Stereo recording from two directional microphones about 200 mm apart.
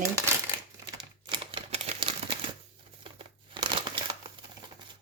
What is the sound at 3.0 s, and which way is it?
Crumpling, 25° right (ahead or behind).